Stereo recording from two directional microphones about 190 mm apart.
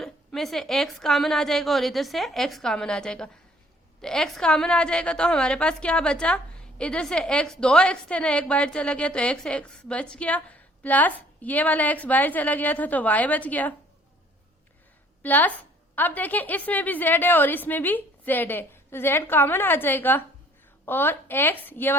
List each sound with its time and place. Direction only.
0.0 s a woman's voice: centre (ahead or behind)
15.2 s a woman's voice: 10° left (ahead or behind)